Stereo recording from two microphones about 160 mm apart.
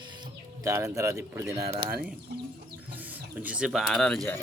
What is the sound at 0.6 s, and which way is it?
Speech, 20° right (ahead or behind).